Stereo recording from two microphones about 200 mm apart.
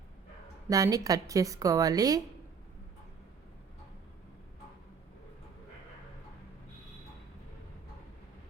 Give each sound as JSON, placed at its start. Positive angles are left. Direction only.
{"t": 0.7, "sound": "a woman's voice", "side_deg": -15}